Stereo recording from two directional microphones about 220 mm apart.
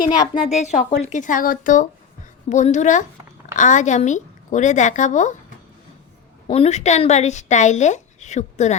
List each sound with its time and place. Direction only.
0.1 s speech: 15° left (ahead or behind)
0.4 s speech: 30° left (ahead or behind)
6.5 s speech: 30° left (ahead or behind)